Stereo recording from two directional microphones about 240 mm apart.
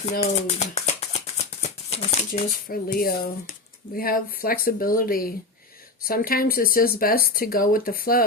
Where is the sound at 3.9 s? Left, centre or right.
Left.